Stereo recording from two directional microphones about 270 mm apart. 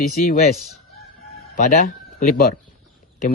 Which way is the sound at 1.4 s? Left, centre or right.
Left.